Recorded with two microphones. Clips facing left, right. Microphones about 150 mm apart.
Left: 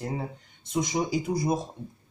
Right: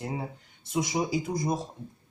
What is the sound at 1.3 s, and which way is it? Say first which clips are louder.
Speech: left 3 dB; 5° left (ahead or behind).